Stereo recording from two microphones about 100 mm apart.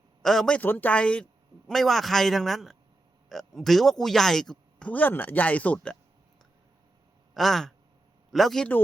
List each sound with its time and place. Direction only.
0.2 s speech: 5° left (ahead or behind)
0.6 s speech: 15° left (ahead or behind)
4.9 s speech: 15° left (ahead or behind)
7.3 s a man's voice: centre (ahead or behind)